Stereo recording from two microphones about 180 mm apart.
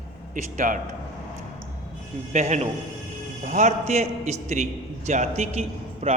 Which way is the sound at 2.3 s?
40° right (ahead or behind).